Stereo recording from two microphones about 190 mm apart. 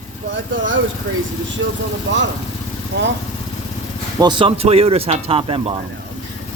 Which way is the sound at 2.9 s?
65° right (ahead or behind).